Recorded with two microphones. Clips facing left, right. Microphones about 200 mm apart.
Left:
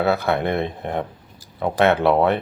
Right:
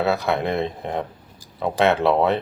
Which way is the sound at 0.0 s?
Centre (ahead or behind).